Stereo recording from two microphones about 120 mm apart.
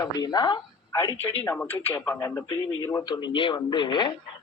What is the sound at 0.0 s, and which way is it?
Speech, 35° left (ahead or behind).